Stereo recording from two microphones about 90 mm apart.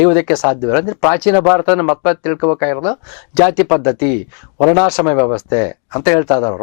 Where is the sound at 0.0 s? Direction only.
15° left (ahead or behind).